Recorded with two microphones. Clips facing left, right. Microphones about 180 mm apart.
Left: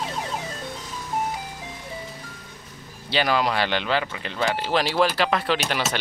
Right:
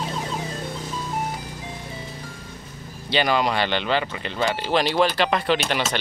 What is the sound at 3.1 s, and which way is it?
Speech, 5° left (ahead or behind).